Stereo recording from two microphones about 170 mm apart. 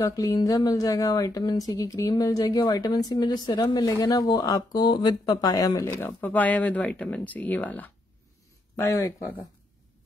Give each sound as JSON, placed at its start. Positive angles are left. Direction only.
{"t": 0.0, "sound": "speech", "side_deg": 20}